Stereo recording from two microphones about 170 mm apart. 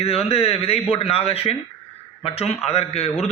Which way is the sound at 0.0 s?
35° left (ahead or behind).